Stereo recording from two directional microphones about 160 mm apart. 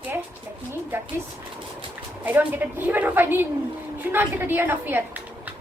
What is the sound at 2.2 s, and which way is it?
A woman's voice, 10° right (ahead or behind).